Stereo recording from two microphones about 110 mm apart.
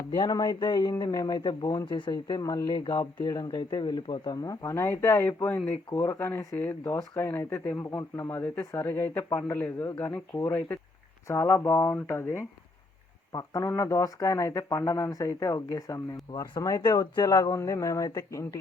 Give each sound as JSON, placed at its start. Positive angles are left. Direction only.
{"t": 0.3, "sound": "speech", "side_deg": 40}